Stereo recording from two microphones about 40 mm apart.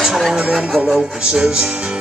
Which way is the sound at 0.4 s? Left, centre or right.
Right.